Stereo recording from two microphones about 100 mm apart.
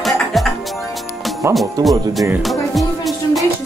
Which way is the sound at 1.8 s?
40° right (ahead or behind).